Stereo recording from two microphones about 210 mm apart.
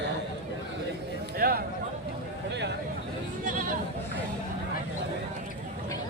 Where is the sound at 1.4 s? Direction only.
50° right (ahead or behind).